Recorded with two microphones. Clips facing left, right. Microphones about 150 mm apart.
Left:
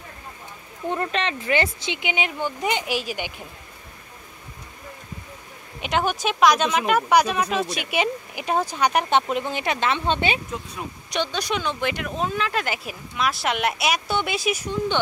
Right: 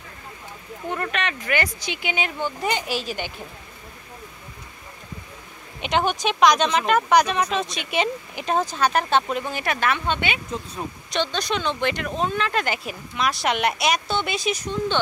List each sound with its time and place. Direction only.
0.8 s speech: 25° left (ahead or behind)
5.8 s speech: 5° left (ahead or behind); by 10.4 s 35° left (ahead or behind)
11.1 s speech: 10° left (ahead or behind)